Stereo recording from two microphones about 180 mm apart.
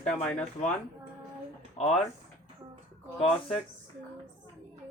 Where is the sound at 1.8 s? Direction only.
35° left (ahead or behind).